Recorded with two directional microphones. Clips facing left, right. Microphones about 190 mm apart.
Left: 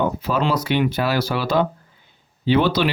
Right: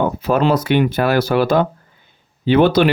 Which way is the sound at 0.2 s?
55° right (ahead or behind).